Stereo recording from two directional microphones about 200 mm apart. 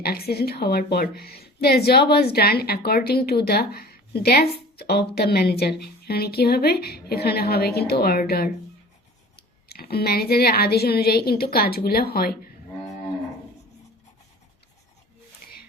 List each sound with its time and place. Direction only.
0.0 s a woman's voice: 50° left (ahead or behind)
9.6 s a woman's voice: 50° left (ahead or behind)